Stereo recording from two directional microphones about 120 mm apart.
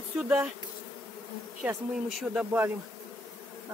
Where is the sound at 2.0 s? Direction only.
5° right (ahead or behind).